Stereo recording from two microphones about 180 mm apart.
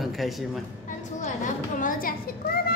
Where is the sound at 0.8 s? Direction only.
45° left (ahead or behind).